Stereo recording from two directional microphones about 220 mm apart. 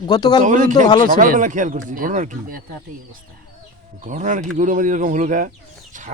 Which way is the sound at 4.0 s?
35° right (ahead or behind).